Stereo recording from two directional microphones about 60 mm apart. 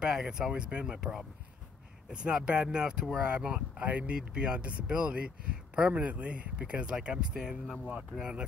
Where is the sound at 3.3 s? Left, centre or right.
Right.